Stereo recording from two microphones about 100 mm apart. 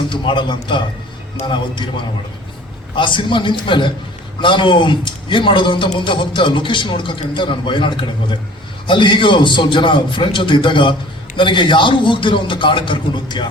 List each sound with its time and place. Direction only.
0.1 s a man's voice: 55° left (ahead or behind)
2.9 s a man's voice: 55° left (ahead or behind)